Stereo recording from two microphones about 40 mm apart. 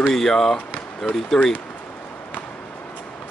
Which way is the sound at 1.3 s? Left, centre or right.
Left.